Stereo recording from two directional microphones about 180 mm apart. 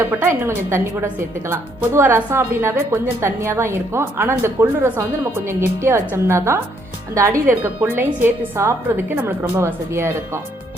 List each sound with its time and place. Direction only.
0.0 s a woman's voice: 15° right (ahead or behind)